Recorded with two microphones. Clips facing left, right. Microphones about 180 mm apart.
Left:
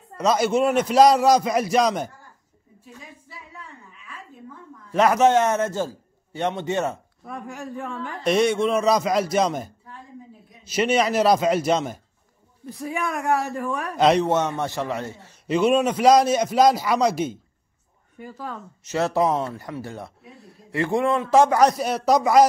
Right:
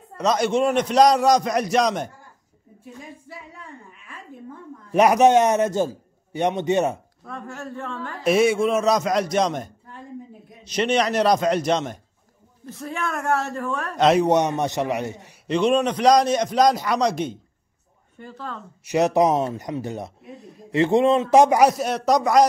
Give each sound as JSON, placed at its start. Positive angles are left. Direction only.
{"t": 0.2, "sound": "a man's voice", "side_deg": 5}
{"t": 4.9, "sound": "a man's voice", "side_deg": -15}
{"t": 7.3, "sound": "speech", "side_deg": 15}
{"t": 8.2, "sound": "a man's voice", "side_deg": -5}
{"t": 12.6, "sound": "speech", "side_deg": 15}
{"t": 13.9, "sound": "a man's voice", "side_deg": 0}
{"t": 14.2, "sound": "a man's voice", "side_deg": -15}
{"t": 15.4, "sound": "a man's voice", "side_deg": 5}
{"t": 18.9, "sound": "speech", "side_deg": -15}
{"t": 21.7, "sound": "a man's voice", "side_deg": 0}